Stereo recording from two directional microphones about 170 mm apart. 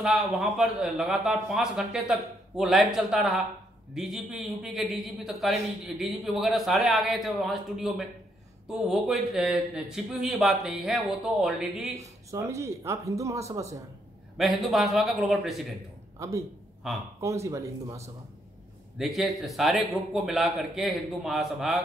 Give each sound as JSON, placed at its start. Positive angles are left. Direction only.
{"t": 0.0, "sound": "a man's voice", "side_deg": 0}
{"t": 12.3, "sound": "speech", "side_deg": -20}
{"t": 14.3, "sound": "a man's voice", "side_deg": 0}
{"t": 16.2, "sound": "speech", "side_deg": -20}
{"t": 16.8, "sound": "a man's voice", "side_deg": -5}
{"t": 17.2, "sound": "speech", "side_deg": -20}
{"t": 18.9, "sound": "a man's voice", "side_deg": 0}